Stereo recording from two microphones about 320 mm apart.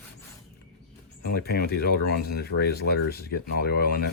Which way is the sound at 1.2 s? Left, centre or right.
Left.